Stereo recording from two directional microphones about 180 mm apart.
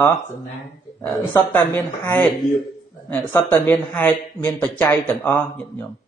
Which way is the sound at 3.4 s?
10° left (ahead or behind).